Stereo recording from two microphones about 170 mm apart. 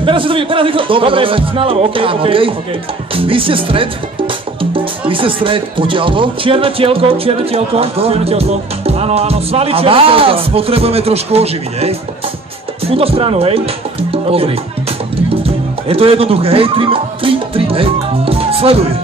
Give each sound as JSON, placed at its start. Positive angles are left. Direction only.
{"t": 0.0, "sound": "speech", "side_deg": -30}
{"t": 12.9, "sound": "speech", "side_deg": -35}
{"t": 15.9, "sound": "speech", "side_deg": -35}